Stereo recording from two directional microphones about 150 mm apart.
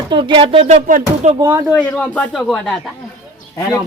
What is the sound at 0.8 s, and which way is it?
Music, 55° right (ahead or behind).